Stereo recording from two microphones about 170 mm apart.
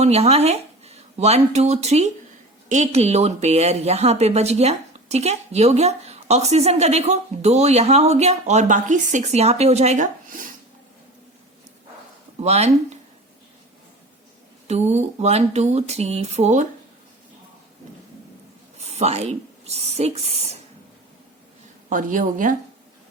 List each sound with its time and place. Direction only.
0.0 s a woman's voice: 40° right (ahead or behind)
12.4 s a woman's voice: 40° right (ahead or behind)
14.7 s a woman's voice: 40° right (ahead or behind)
18.8 s speech: 40° right (ahead or behind)
21.8 s a woman's voice: 50° right (ahead or behind)